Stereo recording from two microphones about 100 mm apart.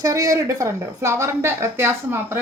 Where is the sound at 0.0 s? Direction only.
35° right (ahead or behind).